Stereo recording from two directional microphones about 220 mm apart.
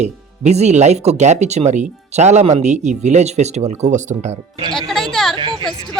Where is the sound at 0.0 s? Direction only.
30° right (ahead or behind).